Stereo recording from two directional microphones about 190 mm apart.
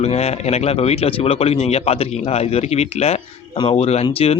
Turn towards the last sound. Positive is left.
turn(degrees=30)  # may be behind; listen again after turning